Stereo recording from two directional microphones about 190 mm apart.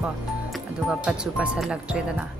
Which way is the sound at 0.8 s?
5° right (ahead or behind).